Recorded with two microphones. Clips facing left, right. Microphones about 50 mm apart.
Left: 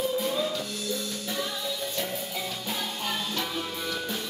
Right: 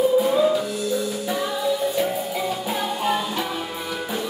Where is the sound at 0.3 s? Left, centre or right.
Right.